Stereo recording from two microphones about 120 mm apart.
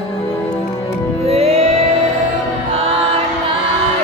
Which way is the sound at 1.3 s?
60° right (ahead or behind).